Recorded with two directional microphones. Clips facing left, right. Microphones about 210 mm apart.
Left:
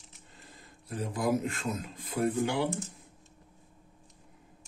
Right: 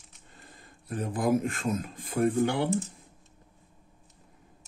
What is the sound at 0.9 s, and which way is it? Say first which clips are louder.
Speech: right 3 dB; 50° right (ahead or behind).